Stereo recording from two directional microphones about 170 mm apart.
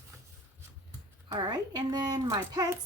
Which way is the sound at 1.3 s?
25° right (ahead or behind).